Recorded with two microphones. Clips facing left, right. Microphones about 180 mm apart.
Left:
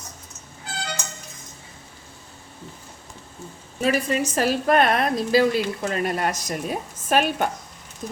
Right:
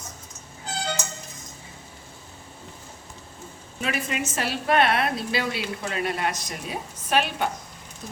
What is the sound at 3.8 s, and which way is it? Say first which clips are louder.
A woman's voice: left 7 dB; 40° left (ahead or behind).